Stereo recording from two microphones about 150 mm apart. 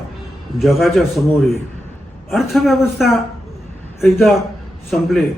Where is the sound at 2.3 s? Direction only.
Centre (ahead or behind).